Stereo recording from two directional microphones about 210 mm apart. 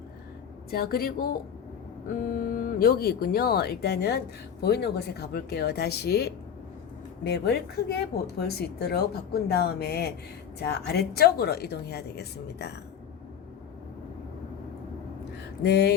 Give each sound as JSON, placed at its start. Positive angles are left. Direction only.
{"t": 0.7, "sound": "speech", "side_deg": 45}
{"t": 15.6, "sound": "speech", "side_deg": 50}